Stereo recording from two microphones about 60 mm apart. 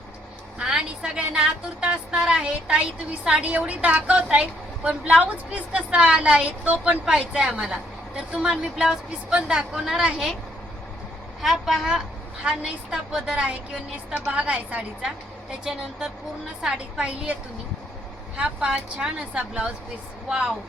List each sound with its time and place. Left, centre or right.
0.6 s a woman's voice: centre
11.4 s a woman's voice: centre
15.7 s a woman's voice: centre
18.3 s a woman's voice: centre